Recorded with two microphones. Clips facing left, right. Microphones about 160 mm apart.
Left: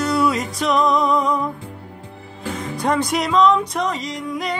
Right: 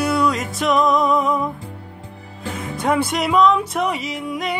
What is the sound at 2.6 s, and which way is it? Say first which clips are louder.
Music: right 1 dB; 5° right (ahead or behind).